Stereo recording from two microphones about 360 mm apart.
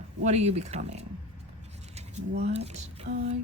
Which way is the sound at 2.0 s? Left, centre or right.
Centre.